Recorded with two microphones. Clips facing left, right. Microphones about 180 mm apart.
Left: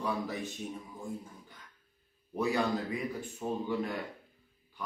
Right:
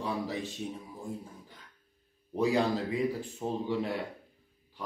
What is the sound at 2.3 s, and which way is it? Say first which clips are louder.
Speech: right 3 dB; 35° right (ahead or behind).